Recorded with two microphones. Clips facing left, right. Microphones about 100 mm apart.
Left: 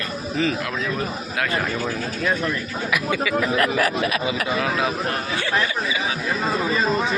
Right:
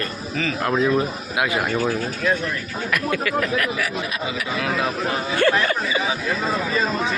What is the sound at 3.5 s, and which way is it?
Speech, 35° left (ahead or behind).